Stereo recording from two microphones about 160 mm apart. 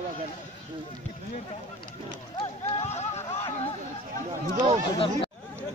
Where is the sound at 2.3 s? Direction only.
40° left (ahead or behind).